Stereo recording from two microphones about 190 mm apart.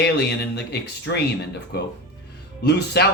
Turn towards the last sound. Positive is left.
turn(degrees=60)  # may be behind; listen again after turning